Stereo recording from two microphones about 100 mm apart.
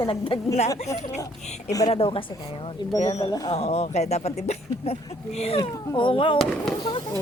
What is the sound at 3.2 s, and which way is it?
Speech, 40° left (ahead or behind).